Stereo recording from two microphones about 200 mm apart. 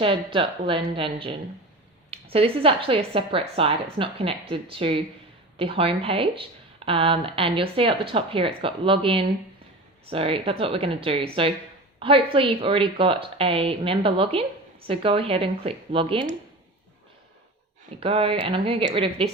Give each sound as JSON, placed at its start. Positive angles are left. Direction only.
{"t": 0.0, "sound": "speech", "side_deg": -25}
{"t": 18.0, "sound": "speech", "side_deg": -30}